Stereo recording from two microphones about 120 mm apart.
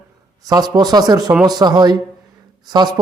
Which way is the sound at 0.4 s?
35° right (ahead or behind).